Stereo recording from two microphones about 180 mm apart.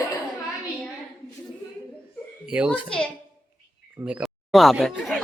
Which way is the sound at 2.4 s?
5° right (ahead or behind).